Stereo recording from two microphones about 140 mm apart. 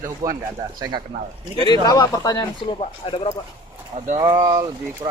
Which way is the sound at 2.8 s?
40° left (ahead or behind).